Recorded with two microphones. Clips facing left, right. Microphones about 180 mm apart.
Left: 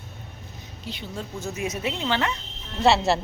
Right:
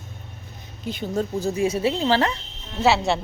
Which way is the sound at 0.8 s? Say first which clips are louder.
Right 9 dB; 45° right (ahead or behind).